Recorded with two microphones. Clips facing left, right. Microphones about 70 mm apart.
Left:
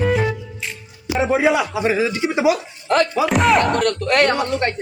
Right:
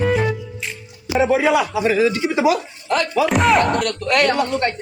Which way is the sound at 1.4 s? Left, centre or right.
Left.